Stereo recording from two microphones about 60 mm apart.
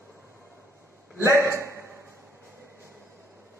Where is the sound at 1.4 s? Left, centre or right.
Right.